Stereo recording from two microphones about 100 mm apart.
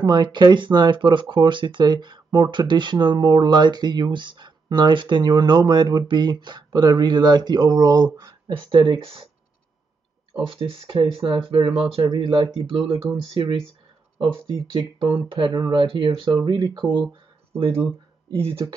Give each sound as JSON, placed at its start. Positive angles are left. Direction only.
{"t": 0.0, "sound": "speech", "side_deg": -50}
{"t": 8.6, "sound": "speech", "side_deg": -60}
{"t": 10.4, "sound": "speech", "side_deg": -65}
{"t": 12.1, "sound": "speech", "side_deg": -50}
{"t": 12.6, "sound": "speech", "side_deg": -65}